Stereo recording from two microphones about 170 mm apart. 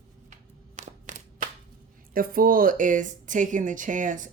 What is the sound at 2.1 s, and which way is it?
Speech, 60° right (ahead or behind).